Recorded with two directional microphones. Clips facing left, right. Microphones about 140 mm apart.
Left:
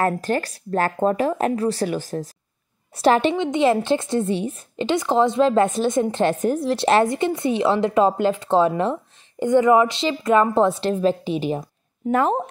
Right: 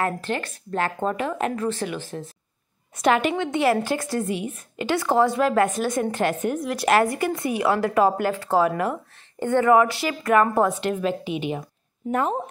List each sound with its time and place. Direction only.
0.0 s a woman's voice: 40° left (ahead or behind)
9.4 s a woman's voice: 15° left (ahead or behind); by 11.6 s 35° left (ahead or behind)
12.1 s speech: 90° left